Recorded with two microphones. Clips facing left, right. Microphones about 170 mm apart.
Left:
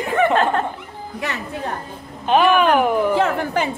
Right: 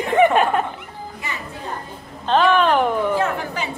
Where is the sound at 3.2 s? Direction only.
55° left (ahead or behind).